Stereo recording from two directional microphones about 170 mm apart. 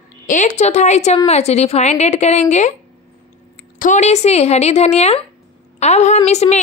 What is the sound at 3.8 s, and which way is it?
A woman's voice, 45° left (ahead or behind).